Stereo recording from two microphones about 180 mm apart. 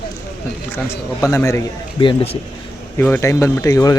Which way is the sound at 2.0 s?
25° left (ahead or behind).